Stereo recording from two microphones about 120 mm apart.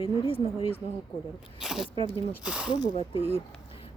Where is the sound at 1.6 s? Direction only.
5° right (ahead or behind).